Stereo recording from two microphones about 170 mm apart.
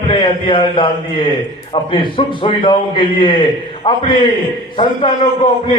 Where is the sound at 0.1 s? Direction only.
30° left (ahead or behind).